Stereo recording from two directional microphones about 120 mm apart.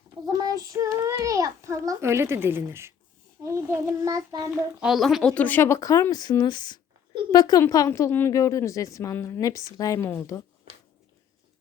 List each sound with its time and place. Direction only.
0.3 s a child's voice: 30° right (ahead or behind)
3.4 s child singing: 25° right (ahead or behind)
4.8 s a woman's voice: centre (ahead or behind); by 10.4 s 25° left (ahead or behind)